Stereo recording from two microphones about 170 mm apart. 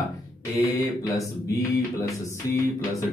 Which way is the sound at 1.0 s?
20° left (ahead or behind).